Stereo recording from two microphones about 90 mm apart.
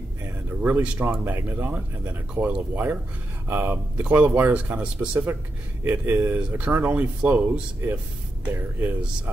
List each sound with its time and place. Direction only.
0.6 s speech: 20° right (ahead or behind)
5.9 s speech: 25° right (ahead or behind)